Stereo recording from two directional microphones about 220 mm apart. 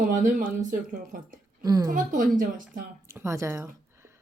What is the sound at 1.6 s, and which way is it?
Speech, 15° right (ahead or behind).